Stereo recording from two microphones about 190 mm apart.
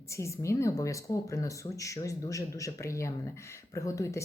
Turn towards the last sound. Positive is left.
turn(degrees=15)  # may be behind; listen again after turning